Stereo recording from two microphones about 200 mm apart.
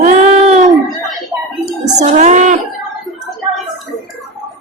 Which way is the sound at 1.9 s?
35° right (ahead or behind).